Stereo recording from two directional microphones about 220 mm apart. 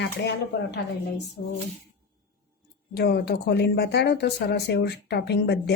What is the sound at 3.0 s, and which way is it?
Speech, 45° left (ahead or behind).